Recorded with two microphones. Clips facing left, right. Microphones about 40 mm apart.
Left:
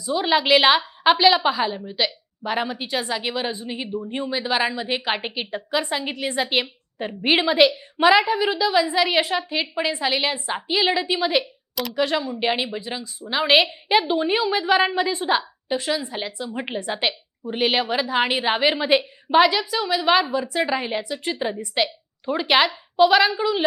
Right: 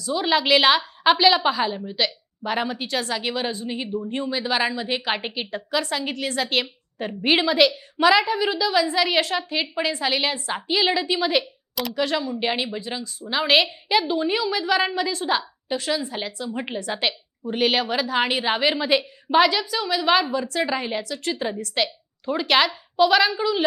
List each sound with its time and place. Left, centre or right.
0.0 s a woman's voice: centre
11.7 s speech: centre
11.9 s a woman's voice: centre